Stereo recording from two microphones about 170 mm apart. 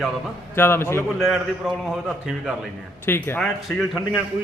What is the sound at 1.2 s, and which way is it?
A man's voice, centre (ahead or behind).